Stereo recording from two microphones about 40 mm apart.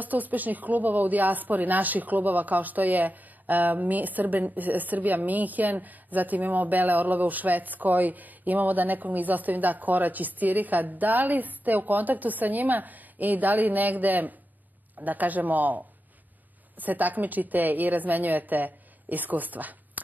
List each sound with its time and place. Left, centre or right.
0.0 s speech: right